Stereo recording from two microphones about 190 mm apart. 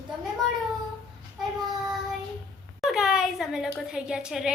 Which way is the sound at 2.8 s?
Centre (ahead or behind).